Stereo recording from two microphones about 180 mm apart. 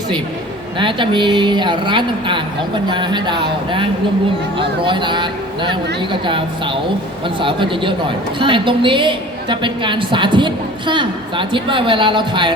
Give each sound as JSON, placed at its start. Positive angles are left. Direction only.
{"t": 0.8, "sound": "a woman's voice", "side_deg": -25}